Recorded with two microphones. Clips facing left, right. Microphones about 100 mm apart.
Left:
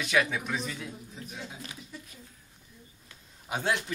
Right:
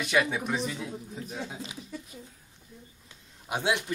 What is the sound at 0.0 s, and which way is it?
Speech, 10° right (ahead or behind).